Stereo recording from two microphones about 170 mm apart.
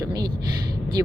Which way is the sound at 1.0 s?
15° right (ahead or behind).